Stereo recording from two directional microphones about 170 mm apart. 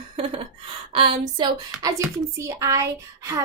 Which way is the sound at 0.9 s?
30° right (ahead or behind).